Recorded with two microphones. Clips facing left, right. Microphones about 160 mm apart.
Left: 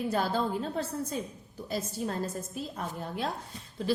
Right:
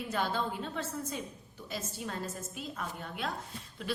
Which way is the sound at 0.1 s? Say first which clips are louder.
Left 2 dB; 40° left (ahead or behind).